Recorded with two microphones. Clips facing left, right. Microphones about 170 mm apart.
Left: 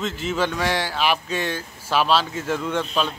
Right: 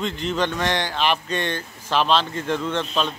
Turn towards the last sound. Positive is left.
turn(degrees=10)  # may be behind; listen again after turning